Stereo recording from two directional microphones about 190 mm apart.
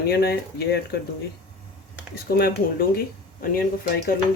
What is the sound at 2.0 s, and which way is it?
Speech, 55° left (ahead or behind).